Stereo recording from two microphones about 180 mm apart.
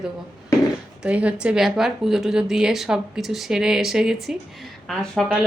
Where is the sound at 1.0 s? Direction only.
5° right (ahead or behind).